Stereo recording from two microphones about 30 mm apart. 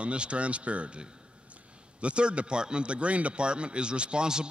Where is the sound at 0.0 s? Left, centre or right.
Right.